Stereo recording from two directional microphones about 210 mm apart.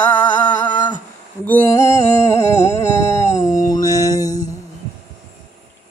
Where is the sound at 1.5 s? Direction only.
10° left (ahead or behind).